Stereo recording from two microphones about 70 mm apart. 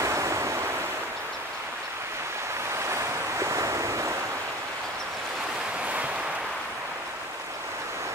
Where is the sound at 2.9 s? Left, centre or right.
Right.